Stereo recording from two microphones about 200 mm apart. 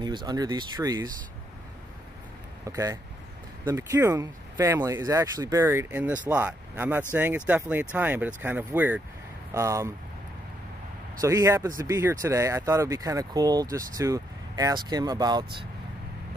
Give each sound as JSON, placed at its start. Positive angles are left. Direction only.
{"t": 0.0, "sound": "speech", "side_deg": -20}
{"t": 2.6, "sound": "speech", "side_deg": -15}
{"t": 11.1, "sound": "speech", "side_deg": -15}